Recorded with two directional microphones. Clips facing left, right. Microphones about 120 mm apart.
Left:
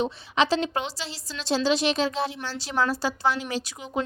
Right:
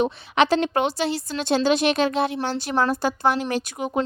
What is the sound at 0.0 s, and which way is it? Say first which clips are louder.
A woman's voice: right 4 dB; 60° right (ahead or behind).